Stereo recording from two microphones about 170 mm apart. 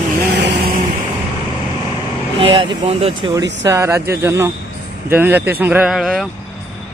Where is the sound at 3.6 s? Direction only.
15° right (ahead or behind).